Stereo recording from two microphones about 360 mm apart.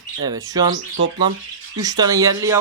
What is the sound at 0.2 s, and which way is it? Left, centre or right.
Speech, centre.